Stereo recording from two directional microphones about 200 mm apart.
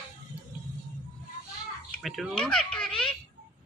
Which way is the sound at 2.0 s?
Centre (ahead or behind).